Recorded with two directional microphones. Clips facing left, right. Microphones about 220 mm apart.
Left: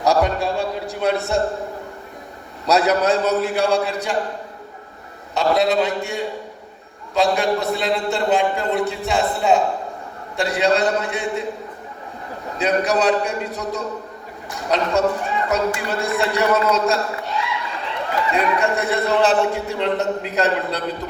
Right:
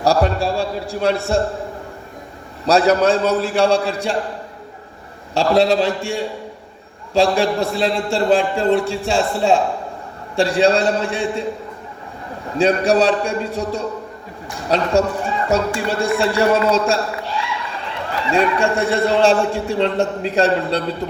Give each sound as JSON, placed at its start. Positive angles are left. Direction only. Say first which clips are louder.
{"t": 0.0, "sound": "a man's voice", "louder": "right 1 dB", "side_deg": -30}
{"t": 2.6, "sound": "a man's voice", "louder": "right 3 dB", "side_deg": -30}
{"t": 5.3, "sound": "a man's voice", "louder": "right 3 dB", "side_deg": -30}
{"t": 12.5, "sound": "a man's voice", "louder": "right 4 dB", "side_deg": -30}